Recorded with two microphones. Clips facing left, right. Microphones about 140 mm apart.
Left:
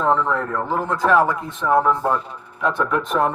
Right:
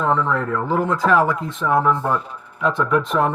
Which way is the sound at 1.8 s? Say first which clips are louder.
Even; 10° left (ahead or behind).